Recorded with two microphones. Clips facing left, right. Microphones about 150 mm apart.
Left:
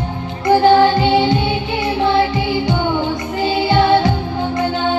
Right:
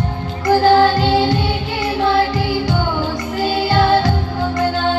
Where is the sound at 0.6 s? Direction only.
20° left (ahead or behind).